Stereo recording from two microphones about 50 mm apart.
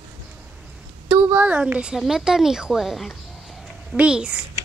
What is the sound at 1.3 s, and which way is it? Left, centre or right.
A woman's voice, right.